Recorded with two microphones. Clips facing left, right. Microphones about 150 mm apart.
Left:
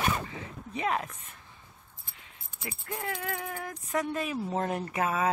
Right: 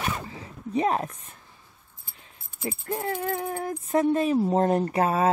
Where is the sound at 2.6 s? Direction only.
40° right (ahead or behind).